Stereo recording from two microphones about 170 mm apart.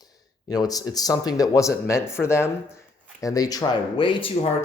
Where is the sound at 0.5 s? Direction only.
20° left (ahead or behind).